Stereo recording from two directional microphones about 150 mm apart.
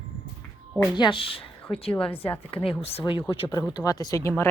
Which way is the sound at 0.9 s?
35° left (ahead or behind).